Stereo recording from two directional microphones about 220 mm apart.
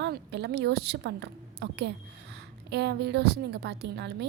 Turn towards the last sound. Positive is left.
turn(degrees=-50)  # may be behind; listen again after turning